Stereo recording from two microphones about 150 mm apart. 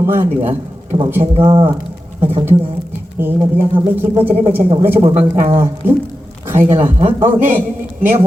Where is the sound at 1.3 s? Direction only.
35° right (ahead or behind).